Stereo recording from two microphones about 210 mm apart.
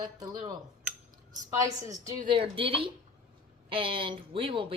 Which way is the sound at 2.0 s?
25° right (ahead or behind).